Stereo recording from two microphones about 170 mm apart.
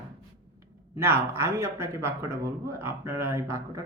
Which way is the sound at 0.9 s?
15° right (ahead or behind).